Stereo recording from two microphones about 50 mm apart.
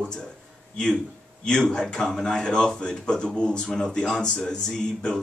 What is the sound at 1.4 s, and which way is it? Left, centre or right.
A man's voice, centre.